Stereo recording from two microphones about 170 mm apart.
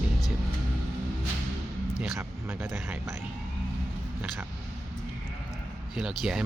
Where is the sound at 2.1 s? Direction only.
15° right (ahead or behind).